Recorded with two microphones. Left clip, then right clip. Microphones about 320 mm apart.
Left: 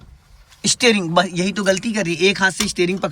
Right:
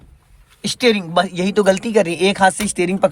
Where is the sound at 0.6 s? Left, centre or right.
Centre.